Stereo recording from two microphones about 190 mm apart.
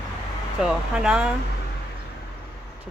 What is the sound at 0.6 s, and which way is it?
Speech, 5° right (ahead or behind).